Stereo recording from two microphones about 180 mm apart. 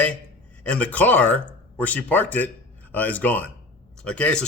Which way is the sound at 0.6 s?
5° left (ahead or behind).